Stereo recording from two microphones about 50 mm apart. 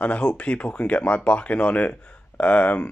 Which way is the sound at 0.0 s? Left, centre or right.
Left.